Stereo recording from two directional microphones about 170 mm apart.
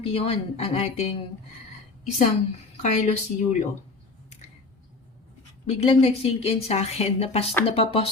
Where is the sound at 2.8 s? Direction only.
45° left (ahead or behind).